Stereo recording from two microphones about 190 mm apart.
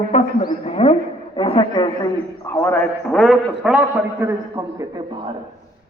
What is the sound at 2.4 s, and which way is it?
Speech, 15° left (ahead or behind).